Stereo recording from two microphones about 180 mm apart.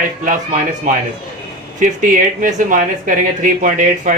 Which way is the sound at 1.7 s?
45° right (ahead or behind).